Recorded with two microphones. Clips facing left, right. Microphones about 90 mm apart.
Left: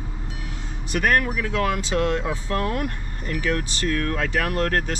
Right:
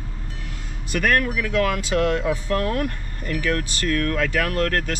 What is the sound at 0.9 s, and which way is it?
Speech, 20° left (ahead or behind).